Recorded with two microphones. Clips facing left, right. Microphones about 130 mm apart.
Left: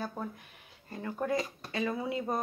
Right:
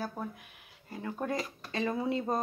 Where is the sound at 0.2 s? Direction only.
5° right (ahead or behind).